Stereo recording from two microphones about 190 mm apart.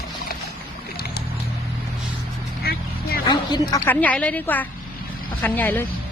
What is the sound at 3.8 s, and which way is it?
Speech, 10° left (ahead or behind).